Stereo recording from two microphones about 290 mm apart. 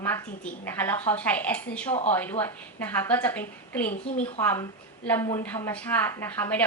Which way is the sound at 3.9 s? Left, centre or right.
Left.